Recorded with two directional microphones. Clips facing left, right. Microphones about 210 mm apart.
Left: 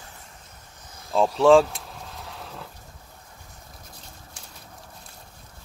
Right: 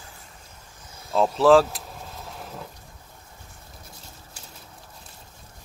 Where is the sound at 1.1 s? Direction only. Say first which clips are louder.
Even; centre (ahead or behind).